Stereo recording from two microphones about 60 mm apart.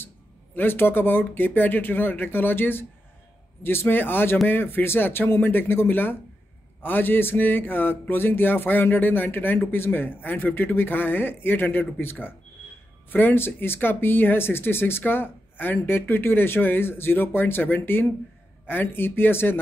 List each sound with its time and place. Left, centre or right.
0.6 s speech: left